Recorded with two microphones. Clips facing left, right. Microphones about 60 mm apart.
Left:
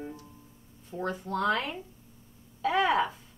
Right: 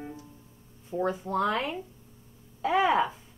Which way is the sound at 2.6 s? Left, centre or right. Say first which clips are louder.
Right 2 dB; centre.